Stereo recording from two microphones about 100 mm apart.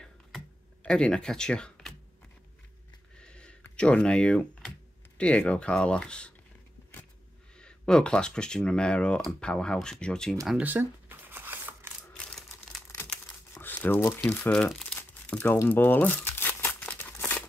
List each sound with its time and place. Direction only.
0.8 s speech: 5° left (ahead or behind)
3.2 s a sound: 10° left (ahead or behind)
3.7 s speech: 10° left (ahead or behind)
7.6 s speech: 10° left (ahead or behind)
10.6 s shuffling cards: 20° right (ahead or behind)
12.9 s crumpling: 35° left (ahead or behind)
13.6 s crumpling: 20° left (ahead or behind)